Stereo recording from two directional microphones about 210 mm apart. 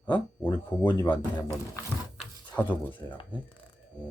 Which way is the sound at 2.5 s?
10° left (ahead or behind).